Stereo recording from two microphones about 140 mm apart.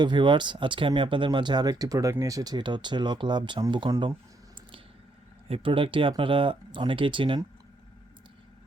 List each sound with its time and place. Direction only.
0.0 s speech: 35° right (ahead or behind)
5.5 s speech: 40° right (ahead or behind)